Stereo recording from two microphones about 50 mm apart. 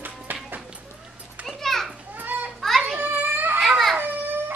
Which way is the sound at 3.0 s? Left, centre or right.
Right.